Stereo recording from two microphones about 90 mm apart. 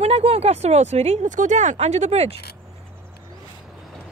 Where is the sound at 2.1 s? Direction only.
90° right.